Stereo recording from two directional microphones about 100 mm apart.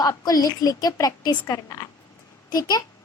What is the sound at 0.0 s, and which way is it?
A woman's voice, 40° left (ahead or behind).